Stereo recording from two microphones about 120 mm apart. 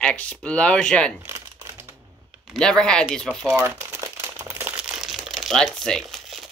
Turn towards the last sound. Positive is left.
turn(degrees=0)  # may be behind; listen again after turning